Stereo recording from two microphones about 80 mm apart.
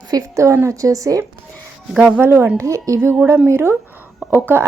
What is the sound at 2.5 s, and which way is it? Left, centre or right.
Speech, right.